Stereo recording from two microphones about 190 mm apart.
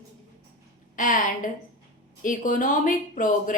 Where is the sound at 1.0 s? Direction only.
45° left (ahead or behind).